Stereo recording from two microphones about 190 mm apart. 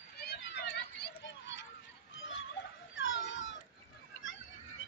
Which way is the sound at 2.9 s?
85° left.